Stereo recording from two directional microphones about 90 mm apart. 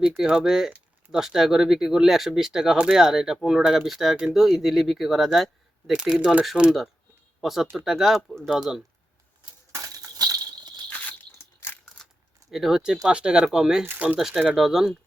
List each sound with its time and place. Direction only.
0.2 s speech: 5° right (ahead or behind)
5.9 s speech: 10° right (ahead or behind)
9.7 s a sound: 40° right (ahead or behind)
10.8 s a sound: 20° left (ahead or behind)
12.5 s speech: centre (ahead or behind)
13.8 s speech: 20° right (ahead or behind)
14.2 s speech: 5° right (ahead or behind)